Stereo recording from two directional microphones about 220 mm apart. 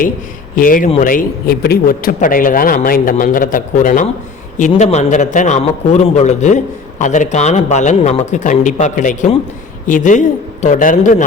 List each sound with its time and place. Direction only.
0.5 s speech: 35° left (ahead or behind)